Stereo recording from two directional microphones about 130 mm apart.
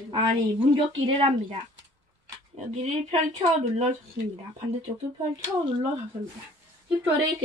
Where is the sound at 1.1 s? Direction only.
45° right (ahead or behind).